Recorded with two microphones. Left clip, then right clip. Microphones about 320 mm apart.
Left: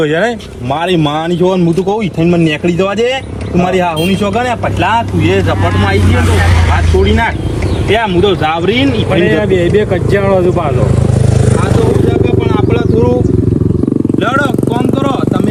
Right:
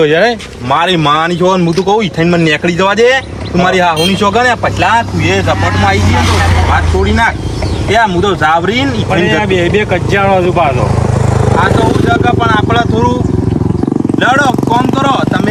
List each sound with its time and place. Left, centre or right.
0.0 s speech: right
0.8 s speech: centre
1.6 s speech: right
4.3 s speech: centre
8.7 s speech: right
11.5 s vehicle: right
14.2 s speech: right